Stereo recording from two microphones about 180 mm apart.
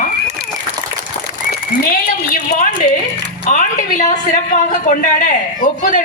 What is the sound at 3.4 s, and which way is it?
A woman's voice, 45° left (ahead or behind).